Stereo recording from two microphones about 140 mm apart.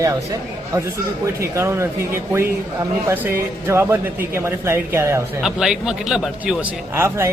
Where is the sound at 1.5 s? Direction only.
20° right (ahead or behind).